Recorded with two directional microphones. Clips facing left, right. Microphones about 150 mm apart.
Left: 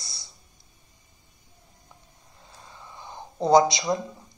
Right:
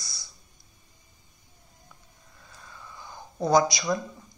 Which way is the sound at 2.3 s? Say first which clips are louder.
Left 1 dB; 25° left (ahead or behind).